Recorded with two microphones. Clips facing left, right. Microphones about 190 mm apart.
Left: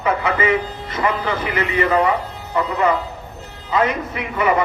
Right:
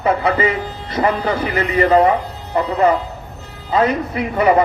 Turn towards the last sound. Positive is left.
turn(degrees=-35)  # may be behind; listen again after turning